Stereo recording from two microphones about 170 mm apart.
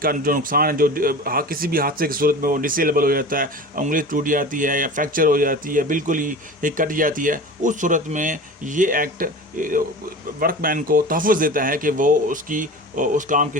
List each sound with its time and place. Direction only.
0.0 s speech: 55° right (ahead or behind)